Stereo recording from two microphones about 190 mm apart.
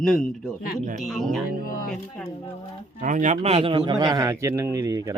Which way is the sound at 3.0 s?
40° right (ahead or behind).